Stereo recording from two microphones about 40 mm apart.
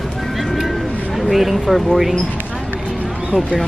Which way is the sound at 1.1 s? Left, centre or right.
Centre.